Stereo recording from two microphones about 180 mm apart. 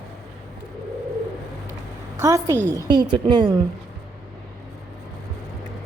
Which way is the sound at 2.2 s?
15° right (ahead or behind).